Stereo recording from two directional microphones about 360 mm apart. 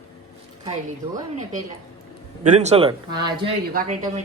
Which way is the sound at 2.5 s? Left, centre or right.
Centre.